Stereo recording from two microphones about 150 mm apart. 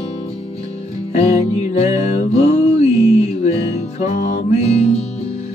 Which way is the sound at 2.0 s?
50° left (ahead or behind).